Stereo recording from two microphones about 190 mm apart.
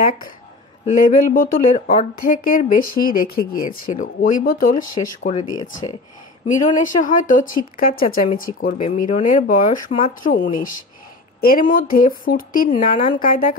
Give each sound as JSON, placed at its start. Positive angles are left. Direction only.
{"t": 0.8, "sound": "speech", "side_deg": 45}
{"t": 5.5, "sound": "speech", "side_deg": 20}
{"t": 6.8, "sound": "speech", "side_deg": 45}